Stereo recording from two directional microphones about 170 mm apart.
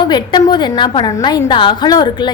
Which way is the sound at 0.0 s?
25° left (ahead or behind).